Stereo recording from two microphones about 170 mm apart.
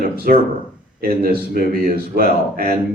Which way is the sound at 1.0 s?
60° right (ahead or behind).